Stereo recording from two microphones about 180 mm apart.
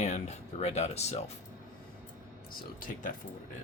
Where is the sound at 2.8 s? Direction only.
50° left (ahead or behind).